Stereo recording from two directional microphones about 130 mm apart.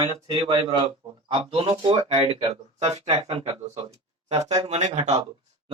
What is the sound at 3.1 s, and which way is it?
Speech, 55° right (ahead or behind).